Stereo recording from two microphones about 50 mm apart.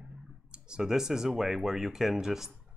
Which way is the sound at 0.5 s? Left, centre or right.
Centre.